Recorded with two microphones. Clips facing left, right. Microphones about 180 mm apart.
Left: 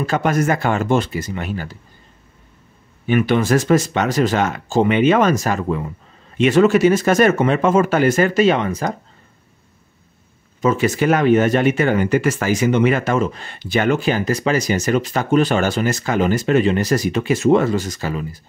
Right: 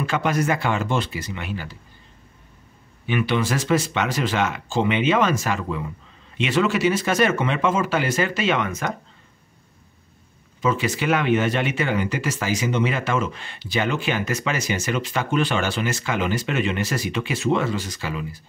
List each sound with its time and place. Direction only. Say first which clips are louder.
0.0 s speech: left 4 dB; 45° left (ahead or behind)
3.1 s speech: left 7 dB; 45° left (ahead or behind)
10.6 s speech: left 6 dB; 45° left (ahead or behind)